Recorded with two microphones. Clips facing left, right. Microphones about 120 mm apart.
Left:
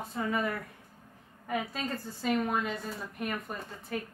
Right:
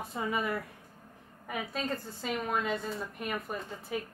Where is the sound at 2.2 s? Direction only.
Centre (ahead or behind).